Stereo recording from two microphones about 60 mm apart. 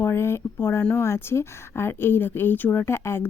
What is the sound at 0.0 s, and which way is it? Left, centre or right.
Speech, left.